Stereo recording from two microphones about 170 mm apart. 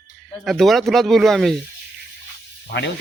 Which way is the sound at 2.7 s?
90° left.